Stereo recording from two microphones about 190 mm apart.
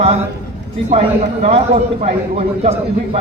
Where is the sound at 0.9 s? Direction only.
35° right (ahead or behind).